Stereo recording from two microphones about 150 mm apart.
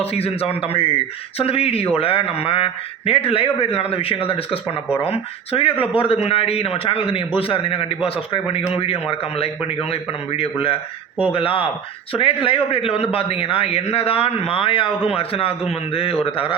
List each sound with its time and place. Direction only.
0.0 s a man's voice: 40° left (ahead or behind)